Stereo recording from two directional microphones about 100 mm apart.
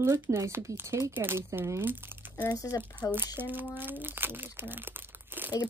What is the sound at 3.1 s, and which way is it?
Speech, 20° right (ahead or behind).